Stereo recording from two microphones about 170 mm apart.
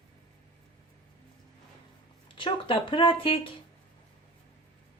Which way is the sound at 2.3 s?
30° left (ahead or behind).